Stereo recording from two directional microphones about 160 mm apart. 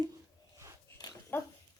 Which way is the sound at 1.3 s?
15° left (ahead or behind).